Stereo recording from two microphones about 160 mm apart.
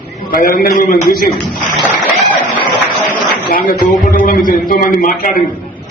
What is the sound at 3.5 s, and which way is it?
A man's voice, 60° left (ahead or behind).